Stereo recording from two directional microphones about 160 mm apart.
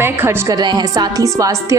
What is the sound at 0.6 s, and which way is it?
Speech, 25° right (ahead or behind).